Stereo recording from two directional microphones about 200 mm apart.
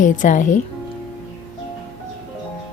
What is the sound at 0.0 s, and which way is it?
Speech, 40° left (ahead or behind).